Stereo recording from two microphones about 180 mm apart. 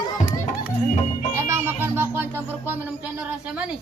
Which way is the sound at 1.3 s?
15° right (ahead or behind).